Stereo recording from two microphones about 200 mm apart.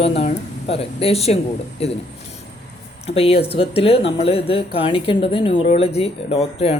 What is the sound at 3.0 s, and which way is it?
Speech, 30° left (ahead or behind).